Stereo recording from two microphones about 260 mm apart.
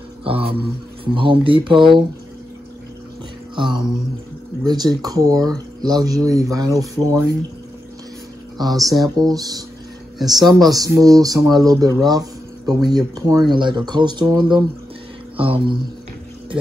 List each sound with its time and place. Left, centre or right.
0.2 s speech: right
3.5 s speech: centre
9.1 s speech: centre